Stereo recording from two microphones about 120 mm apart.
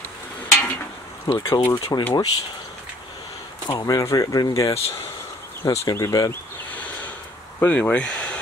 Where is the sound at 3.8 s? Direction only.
30° left (ahead or behind).